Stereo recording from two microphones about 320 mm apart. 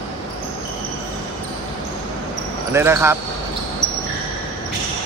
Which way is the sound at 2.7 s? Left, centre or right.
Centre.